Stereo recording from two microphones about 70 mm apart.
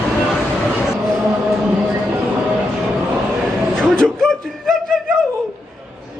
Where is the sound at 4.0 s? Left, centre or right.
Centre.